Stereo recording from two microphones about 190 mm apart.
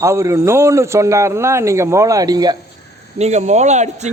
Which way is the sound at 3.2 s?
35° right (ahead or behind).